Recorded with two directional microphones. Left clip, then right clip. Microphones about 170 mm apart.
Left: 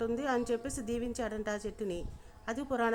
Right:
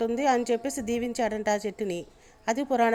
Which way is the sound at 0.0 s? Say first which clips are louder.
Right 8 dB; 20° right (ahead or behind).